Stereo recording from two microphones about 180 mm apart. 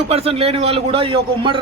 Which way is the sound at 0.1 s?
35° right (ahead or behind).